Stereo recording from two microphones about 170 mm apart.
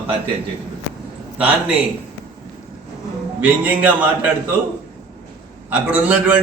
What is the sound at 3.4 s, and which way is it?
Speech, 10° right (ahead or behind).